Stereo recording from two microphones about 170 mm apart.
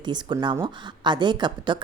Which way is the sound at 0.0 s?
25° right (ahead or behind).